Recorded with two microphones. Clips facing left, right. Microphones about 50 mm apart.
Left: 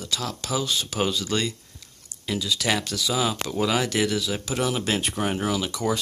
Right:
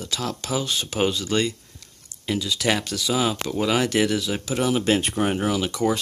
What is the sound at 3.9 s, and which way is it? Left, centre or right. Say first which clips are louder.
Speech: right 2 dB; centre.